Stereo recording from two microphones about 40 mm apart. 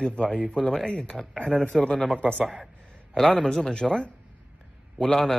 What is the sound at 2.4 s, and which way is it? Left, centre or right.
Speech, centre.